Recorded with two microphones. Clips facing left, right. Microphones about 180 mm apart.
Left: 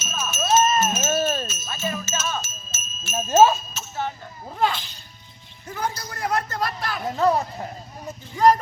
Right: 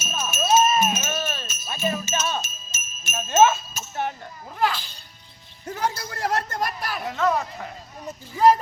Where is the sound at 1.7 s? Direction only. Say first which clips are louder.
Right 3 dB; 15° right (ahead or behind).